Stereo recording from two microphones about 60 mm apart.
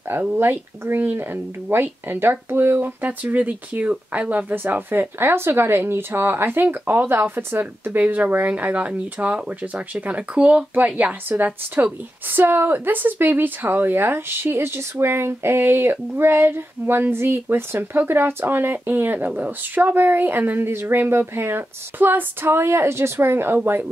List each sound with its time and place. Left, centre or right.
0.4 s speech: right
11.2 s speech: right